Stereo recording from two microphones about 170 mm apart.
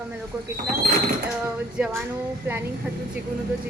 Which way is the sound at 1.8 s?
5° right (ahead or behind).